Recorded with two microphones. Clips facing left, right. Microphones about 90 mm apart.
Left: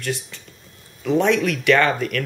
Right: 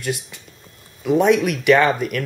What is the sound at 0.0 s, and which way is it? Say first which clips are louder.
Speech: right 1 dB; 15° right (ahead or behind).